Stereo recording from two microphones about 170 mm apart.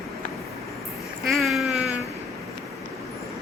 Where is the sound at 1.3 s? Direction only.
Centre (ahead or behind).